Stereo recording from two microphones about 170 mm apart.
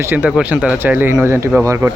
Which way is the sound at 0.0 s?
10° right (ahead or behind).